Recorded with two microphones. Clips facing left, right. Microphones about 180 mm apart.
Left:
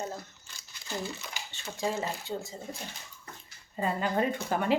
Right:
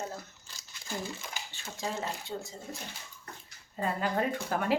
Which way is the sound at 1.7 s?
Centre (ahead or behind).